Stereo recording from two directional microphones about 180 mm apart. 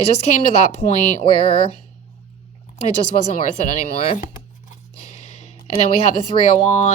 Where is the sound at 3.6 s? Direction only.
35° left (ahead or behind).